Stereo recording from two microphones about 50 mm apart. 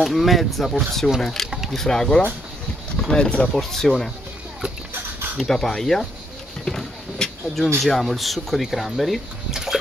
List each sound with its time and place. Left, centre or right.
0.0 s speech: centre
1.5 s a sound: centre
1.8 s speech: centre
3.5 s speech: centre
5.4 s speech: centre
6.6 s vehicle: centre
7.8 s speech: centre
9.5 s a sound: centre